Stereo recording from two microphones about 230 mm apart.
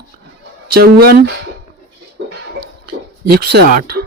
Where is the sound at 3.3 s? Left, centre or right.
Right.